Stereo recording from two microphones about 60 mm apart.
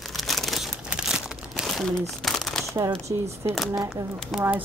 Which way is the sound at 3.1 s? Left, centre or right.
Right.